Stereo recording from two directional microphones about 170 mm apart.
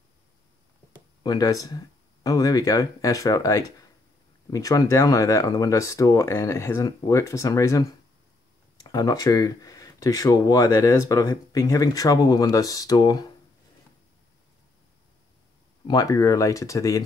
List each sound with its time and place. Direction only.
1.2 s speech: 20° left (ahead or behind)
8.8 s speech: 20° left (ahead or behind)
15.9 s speech: 20° left (ahead or behind)